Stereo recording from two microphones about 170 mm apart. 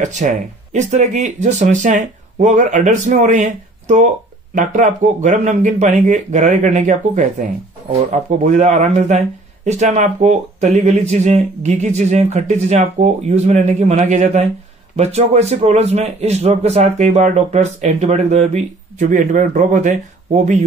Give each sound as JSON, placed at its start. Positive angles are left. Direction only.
{"t": 0.0, "sound": "a man's voice", "side_deg": -45}